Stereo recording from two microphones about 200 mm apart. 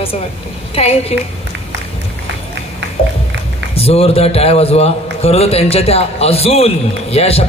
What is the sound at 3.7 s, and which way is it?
A man's voice, 30° left (ahead or behind).